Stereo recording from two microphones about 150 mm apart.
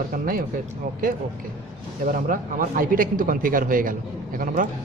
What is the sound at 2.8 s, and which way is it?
A man's voice, 70° right (ahead or behind).